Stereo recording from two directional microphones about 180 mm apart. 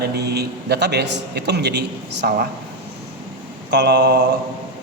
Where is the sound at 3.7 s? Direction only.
70° right (ahead or behind).